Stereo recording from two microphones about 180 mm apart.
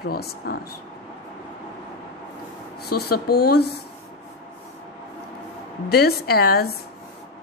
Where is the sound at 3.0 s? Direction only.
60° left (ahead or behind).